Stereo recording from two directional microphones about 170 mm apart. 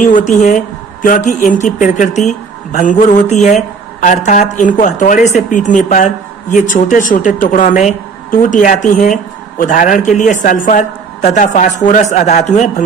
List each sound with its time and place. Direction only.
0.0 s speech: 45° left (ahead or behind)